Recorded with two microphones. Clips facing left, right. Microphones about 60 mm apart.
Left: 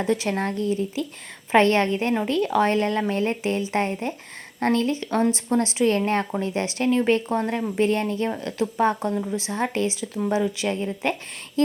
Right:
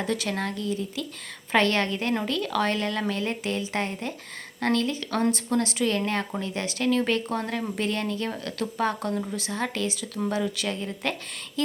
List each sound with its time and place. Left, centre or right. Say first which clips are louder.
0.0 s speech: left 4 dB; left